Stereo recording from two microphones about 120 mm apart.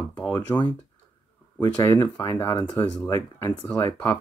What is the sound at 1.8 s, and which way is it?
Speech, 25° left (ahead or behind).